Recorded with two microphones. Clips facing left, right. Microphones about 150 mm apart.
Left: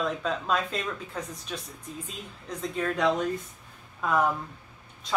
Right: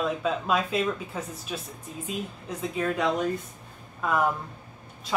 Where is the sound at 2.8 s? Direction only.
5° right (ahead or behind).